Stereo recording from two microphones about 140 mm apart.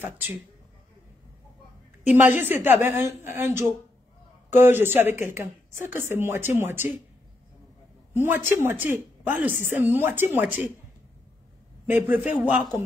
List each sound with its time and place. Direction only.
2.0 s a woman's voice: 15° right (ahead or behind)
8.1 s a woman's voice: 15° right (ahead or behind)
11.8 s a woman's voice: 10° right (ahead or behind)